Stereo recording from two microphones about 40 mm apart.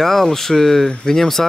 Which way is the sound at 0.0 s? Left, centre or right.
Centre.